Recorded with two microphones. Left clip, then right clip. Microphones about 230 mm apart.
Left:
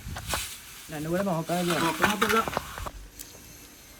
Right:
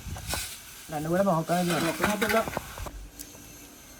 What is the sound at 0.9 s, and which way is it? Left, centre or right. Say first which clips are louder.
Speech: right 3 dB; right.